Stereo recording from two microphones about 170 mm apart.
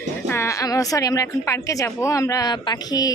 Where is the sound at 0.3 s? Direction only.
15° left (ahead or behind).